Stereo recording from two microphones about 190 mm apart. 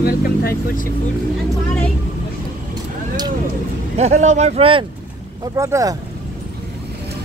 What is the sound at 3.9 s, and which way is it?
Speech, 35° right (ahead or behind).